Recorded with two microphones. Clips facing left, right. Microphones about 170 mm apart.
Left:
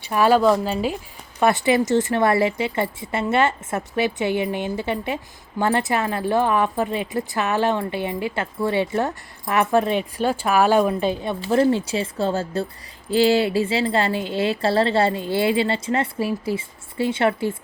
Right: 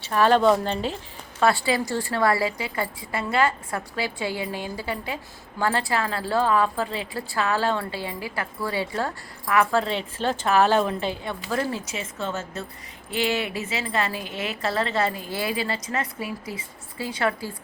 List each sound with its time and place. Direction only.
0.0 s a woman's voice: 10° left (ahead or behind)
1.4 s a woman's voice: 20° left (ahead or behind)